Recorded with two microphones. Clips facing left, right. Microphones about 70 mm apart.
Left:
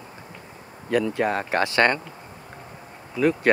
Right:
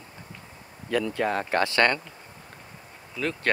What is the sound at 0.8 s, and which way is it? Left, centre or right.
Speech, left.